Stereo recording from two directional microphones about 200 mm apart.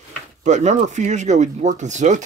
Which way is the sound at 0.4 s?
35° right (ahead or behind).